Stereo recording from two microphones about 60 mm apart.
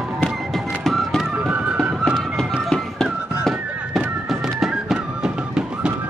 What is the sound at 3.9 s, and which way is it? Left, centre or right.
Music, centre.